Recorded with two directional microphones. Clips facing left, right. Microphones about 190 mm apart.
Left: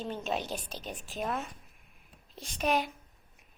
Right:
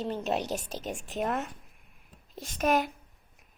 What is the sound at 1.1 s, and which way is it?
Speech, 70° right (ahead or behind).